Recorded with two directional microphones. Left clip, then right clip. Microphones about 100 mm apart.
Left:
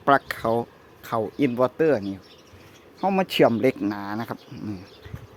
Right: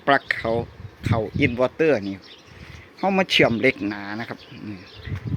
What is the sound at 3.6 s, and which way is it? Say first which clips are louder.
Speech: right 2 dB; 20° left (ahead or behind).